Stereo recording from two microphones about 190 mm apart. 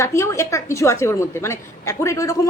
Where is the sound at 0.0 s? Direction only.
15° left (ahead or behind).